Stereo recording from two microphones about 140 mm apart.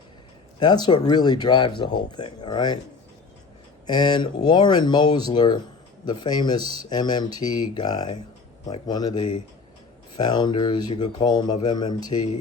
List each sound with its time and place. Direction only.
0.6 s speech: 30° left (ahead or behind)
3.8 s speech: 30° left (ahead or behind)